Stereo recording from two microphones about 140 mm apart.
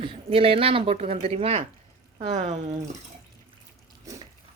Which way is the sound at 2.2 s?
55° right (ahead or behind).